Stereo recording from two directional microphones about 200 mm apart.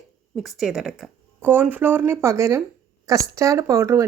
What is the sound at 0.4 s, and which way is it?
Speech, centre (ahead or behind).